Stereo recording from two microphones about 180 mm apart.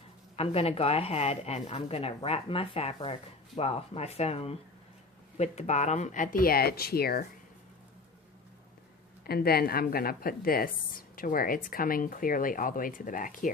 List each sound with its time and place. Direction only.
0.3 s a woman's voice: 35° left (ahead or behind); by 7.3 s 60° left (ahead or behind)
9.2 s a woman's voice: 60° left (ahead or behind)